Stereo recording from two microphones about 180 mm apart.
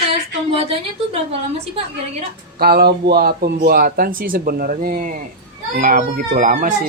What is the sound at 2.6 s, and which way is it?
Speech, 60° right (ahead or behind).